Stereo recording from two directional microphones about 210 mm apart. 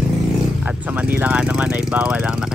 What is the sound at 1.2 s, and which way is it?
Speech, 5° right (ahead or behind).